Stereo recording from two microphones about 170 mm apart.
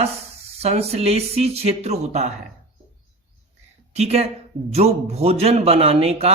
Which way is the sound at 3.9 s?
40° right (ahead or behind).